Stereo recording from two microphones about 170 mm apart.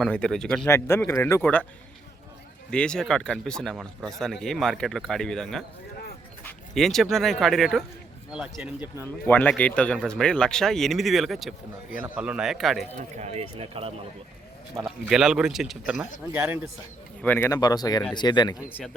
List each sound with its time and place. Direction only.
0.0 s a man's voice: 5° left (ahead or behind)
0.7 s speech: 15° left (ahead or behind)
2.6 s a man's voice: 5° left (ahead or behind)
9.2 s a man's voice: 10° left (ahead or behind)
13.0 s speech: 40° right (ahead or behind)
14.8 s a man's voice: centre (ahead or behind)
17.2 s speech: 10° left (ahead or behind)
17.5 s speech: 20° left (ahead or behind)